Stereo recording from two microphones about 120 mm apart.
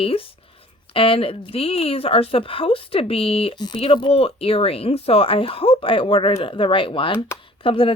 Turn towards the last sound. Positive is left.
turn(degrees=50)  # may be behind; listen again after turning